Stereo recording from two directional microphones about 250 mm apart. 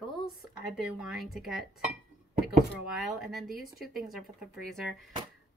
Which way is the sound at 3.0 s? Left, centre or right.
Centre.